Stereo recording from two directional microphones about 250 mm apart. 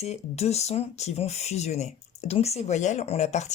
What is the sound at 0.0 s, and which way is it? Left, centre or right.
Speech, left.